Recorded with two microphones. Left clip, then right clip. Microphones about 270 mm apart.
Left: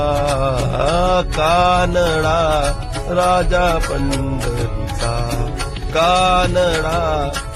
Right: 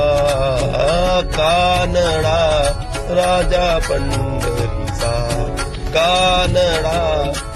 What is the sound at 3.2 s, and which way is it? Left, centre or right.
Music, centre.